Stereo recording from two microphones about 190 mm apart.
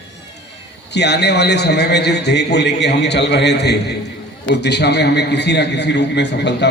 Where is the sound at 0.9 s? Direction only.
60° left (ahead or behind).